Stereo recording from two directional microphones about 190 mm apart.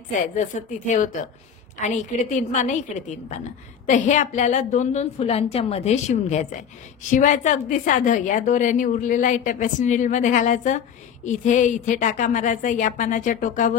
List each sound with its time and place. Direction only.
0.1 s a woman's voice: 40° left (ahead or behind)